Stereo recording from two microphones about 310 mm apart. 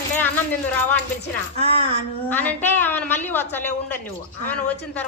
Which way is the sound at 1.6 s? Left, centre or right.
Centre.